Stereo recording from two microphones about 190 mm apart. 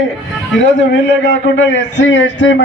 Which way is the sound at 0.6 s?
70° left (ahead or behind).